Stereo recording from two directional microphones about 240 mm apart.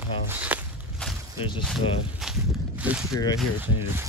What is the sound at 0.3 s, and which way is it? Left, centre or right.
Walk, centre.